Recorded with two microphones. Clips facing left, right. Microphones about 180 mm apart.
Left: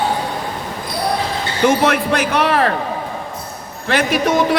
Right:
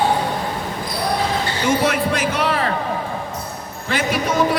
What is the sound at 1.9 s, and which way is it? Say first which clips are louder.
Speech: left 3 dB; 65° left (ahead or behind).